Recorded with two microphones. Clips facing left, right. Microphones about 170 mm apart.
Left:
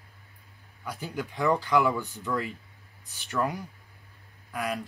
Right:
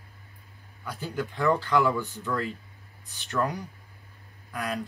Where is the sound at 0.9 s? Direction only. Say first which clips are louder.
Right 2 dB; 10° left (ahead or behind).